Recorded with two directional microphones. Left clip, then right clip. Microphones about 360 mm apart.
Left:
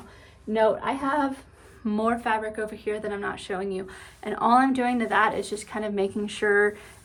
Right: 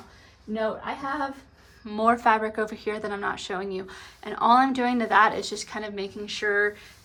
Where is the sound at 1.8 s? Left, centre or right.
Centre.